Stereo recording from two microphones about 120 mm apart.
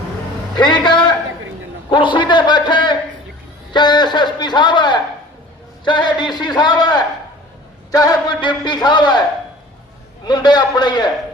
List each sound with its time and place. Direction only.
0.5 s a man's voice: 40° left (ahead or behind)
1.9 s a sound: 45° left (ahead or behind)
3.7 s a man's voice: 40° left (ahead or behind)
10.2 s a man's voice: 35° left (ahead or behind)